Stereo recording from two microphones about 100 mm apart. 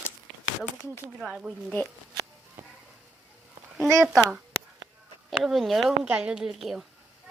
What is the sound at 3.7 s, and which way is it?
Speech, centre (ahead or behind).